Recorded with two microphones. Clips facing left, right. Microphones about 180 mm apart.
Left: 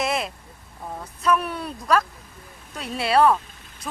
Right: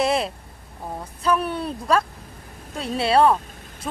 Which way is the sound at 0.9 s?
30° right (ahead or behind).